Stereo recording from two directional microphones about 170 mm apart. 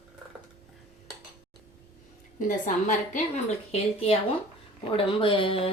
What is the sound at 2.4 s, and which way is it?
Speech, 50° left (ahead or behind).